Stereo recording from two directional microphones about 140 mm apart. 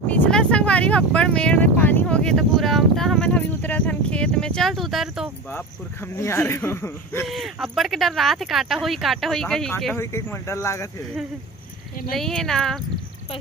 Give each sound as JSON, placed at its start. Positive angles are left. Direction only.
{"t": 0.1, "sound": "speech", "side_deg": 10}
{"t": 6.1, "sound": "speech", "side_deg": 20}
{"t": 7.2, "sound": "speech", "side_deg": 0}
{"t": 9.9, "sound": "speech", "side_deg": 20}
{"t": 12.1, "sound": "speech", "side_deg": 5}